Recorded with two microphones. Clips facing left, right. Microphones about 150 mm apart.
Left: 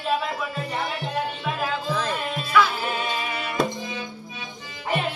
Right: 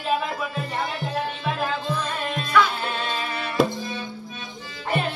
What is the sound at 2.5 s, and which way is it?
Music, 5° left (ahead or behind).